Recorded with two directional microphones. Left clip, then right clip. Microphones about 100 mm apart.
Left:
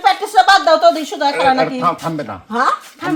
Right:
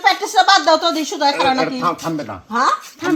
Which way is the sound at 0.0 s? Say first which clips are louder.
Left 2 dB; 40° left (ahead or behind).